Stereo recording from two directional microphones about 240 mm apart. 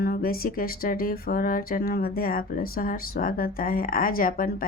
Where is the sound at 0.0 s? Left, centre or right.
Left.